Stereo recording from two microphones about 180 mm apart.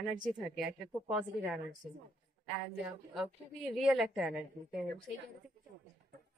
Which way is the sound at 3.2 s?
Centre (ahead or behind).